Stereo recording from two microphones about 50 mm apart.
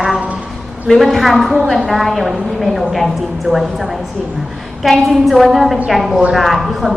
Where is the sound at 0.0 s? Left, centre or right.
Centre.